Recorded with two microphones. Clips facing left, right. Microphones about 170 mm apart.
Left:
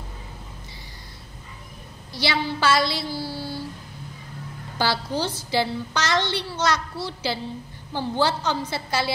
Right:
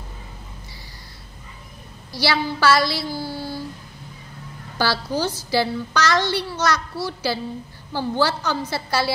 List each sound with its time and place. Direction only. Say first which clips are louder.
2.1 s a child's voice: right 3 dB; 20° left (ahead or behind)
3.2 s a sound: right 2 dB; 50° right (ahead or behind)
4.7 s a child's voice: right 2 dB; 20° left (ahead or behind)